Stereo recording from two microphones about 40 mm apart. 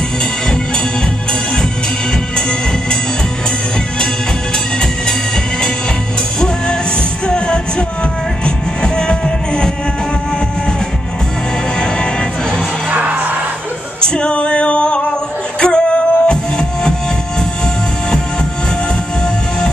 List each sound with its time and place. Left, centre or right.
7.2 s music: left
12.9 s music: right
14.0 s female singing: left
15.6 s music: left